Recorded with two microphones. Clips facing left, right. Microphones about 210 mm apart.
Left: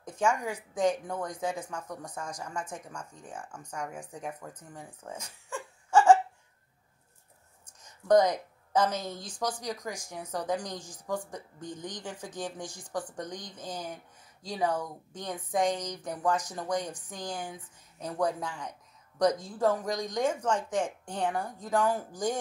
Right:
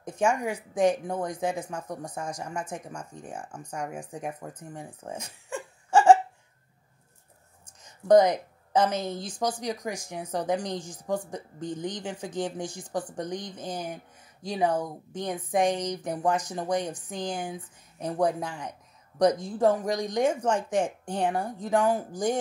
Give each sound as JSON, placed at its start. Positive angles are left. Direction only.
{"t": 0.5, "sound": "a woman's voice", "side_deg": -15}
{"t": 2.5, "sound": "speech", "side_deg": -15}
{"t": 8.1, "sound": "speech", "side_deg": -20}
{"t": 19.9, "sound": "speech", "side_deg": -65}
{"t": 20.2, "sound": "a woman's voice", "side_deg": -15}